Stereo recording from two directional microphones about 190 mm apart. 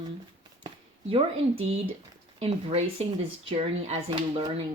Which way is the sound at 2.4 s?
30° right (ahead or behind).